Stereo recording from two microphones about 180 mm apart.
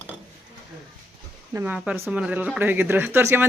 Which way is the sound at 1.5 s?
10° right (ahead or behind).